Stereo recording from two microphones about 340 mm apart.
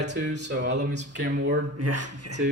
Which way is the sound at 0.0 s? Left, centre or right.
Right.